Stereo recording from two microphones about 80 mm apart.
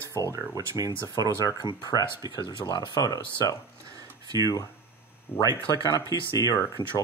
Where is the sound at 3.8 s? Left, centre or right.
Right.